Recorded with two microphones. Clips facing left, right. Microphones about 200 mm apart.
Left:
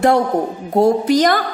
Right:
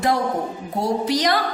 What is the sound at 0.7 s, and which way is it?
Speech, 50° left (ahead or behind).